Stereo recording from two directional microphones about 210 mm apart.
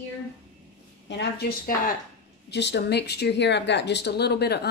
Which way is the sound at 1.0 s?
55° left (ahead or behind).